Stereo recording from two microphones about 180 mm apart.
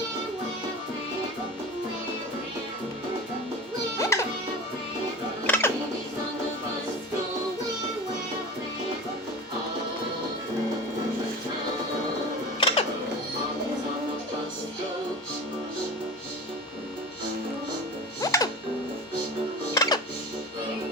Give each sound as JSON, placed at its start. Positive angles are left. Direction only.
{"t": 3.9, "sound": "music", "side_deg": 15}
{"t": 5.5, "sound": "music", "side_deg": 10}
{"t": 12.5, "sound": "music", "side_deg": 30}
{"t": 18.2, "sound": "music", "side_deg": 20}
{"t": 19.7, "sound": "music", "side_deg": 20}